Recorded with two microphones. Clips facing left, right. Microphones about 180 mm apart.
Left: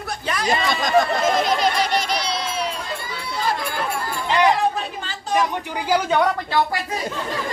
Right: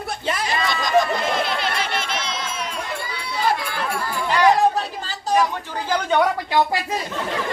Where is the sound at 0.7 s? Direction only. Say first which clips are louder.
Right 1 dB; 45° left (ahead or behind).